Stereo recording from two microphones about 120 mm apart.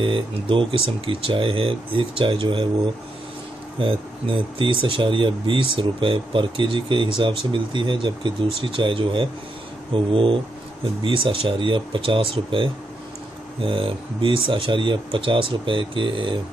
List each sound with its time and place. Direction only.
0.0 s speech: 45° right (ahead or behind)
3.8 s speech: 45° right (ahead or behind)